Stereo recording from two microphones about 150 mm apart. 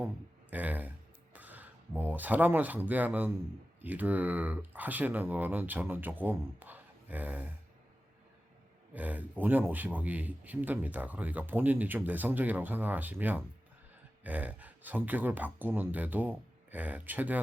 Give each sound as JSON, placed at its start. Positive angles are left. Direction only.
{"t": 0.5, "sound": "a sound", "side_deg": -10}
{"t": 3.8, "sound": "a man's voice", "side_deg": -10}
{"t": 8.9, "sound": "a man's voice", "side_deg": -10}